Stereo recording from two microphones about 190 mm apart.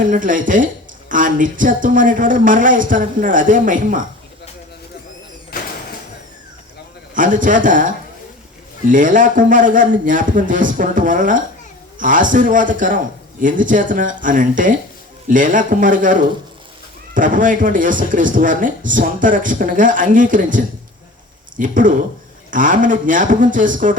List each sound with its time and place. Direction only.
0.1 s a woman's voice: 45° right (ahead or behind)
7.1 s a woman's voice: 45° right (ahead or behind)